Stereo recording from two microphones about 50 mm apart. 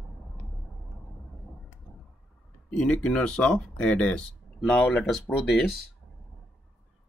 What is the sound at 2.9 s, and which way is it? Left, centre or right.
Speech, centre.